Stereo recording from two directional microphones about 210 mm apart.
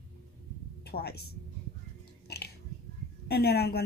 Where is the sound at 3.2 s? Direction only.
50° left (ahead or behind).